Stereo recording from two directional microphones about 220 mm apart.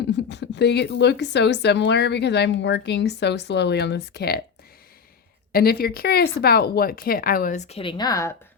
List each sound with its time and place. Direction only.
0.1 s a woman's voice: 50° left (ahead or behind)
5.5 s a woman's voice: 45° left (ahead or behind); by 8.3 s 15° left (ahead or behind)